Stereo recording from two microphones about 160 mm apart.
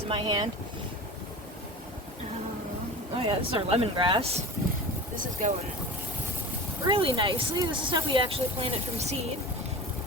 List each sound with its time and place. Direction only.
0.1 s speech: 30° right (ahead or behind)
3.2 s speech: 40° right (ahead or behind)
5.2 s speech: 50° right (ahead or behind)
6.8 s speech: 30° right (ahead or behind)